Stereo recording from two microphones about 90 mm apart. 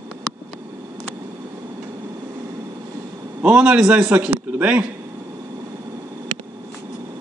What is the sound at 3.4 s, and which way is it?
A man's voice, 10° right (ahead or behind).